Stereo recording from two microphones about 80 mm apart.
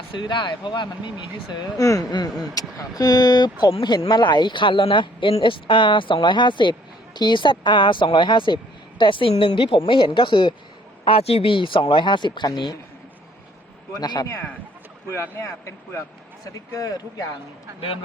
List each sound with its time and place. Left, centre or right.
0.1 s speech: left
1.8 s speech: left
11.5 s speech: left
13.9 s a man's voice: left
14.3 s a man's voice: left
15.1 s a man's voice: left
16.7 s speech: left